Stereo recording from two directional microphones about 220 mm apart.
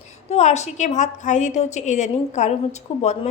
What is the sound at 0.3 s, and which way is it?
A woman's voice, 30° left (ahead or behind).